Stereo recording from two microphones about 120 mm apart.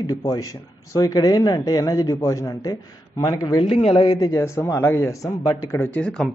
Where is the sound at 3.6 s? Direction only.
55° left (ahead or behind); by 5.7 s 30° left (ahead or behind).